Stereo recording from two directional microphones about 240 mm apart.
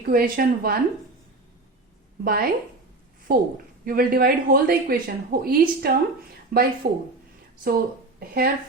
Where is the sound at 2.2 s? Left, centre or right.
Right.